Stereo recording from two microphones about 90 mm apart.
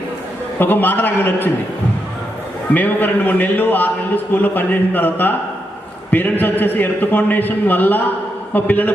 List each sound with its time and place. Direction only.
0.6 s a man's voice: 20° left (ahead or behind)
2.7 s a man's voice: 20° left (ahead or behind)